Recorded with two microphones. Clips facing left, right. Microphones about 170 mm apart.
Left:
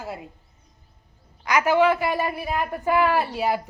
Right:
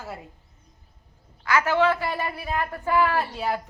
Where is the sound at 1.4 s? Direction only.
15° left (ahead or behind).